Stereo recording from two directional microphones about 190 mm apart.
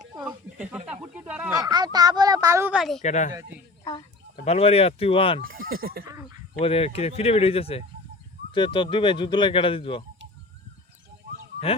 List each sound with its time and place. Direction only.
0.2 s a sound: 5° right (ahead or behind)
1.5 s speech: 20° right (ahead or behind)
2.7 s a woman's voice: centre (ahead or behind)
3.0 s speech: 40° left (ahead or behind)
4.4 s speech: 35° left (ahead or behind)
5.4 s speech: 50° right (ahead or behind)
6.6 s speech: 30° left (ahead or behind)